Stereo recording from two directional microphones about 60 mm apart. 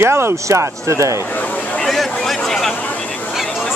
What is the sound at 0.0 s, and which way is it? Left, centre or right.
Speech, right.